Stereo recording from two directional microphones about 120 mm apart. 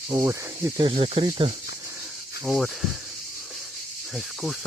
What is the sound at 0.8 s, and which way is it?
Speech, 50° right (ahead or behind).